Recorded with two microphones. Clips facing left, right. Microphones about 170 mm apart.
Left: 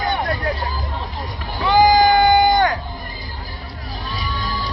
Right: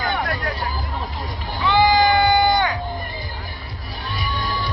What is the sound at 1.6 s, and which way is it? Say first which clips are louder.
Sheep: left 3 dB; 40° left (ahead or behind).